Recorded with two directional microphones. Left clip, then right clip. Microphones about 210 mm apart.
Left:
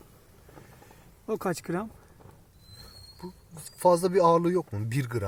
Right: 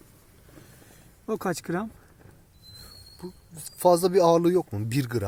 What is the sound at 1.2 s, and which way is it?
Speech, centre (ahead or behind).